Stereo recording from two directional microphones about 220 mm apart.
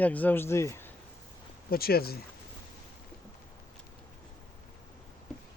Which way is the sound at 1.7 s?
45° left (ahead or behind).